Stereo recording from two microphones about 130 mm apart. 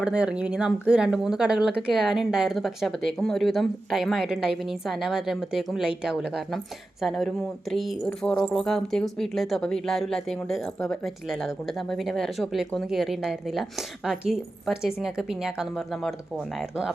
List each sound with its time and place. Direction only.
0.0 s speech: 5° right (ahead or behind)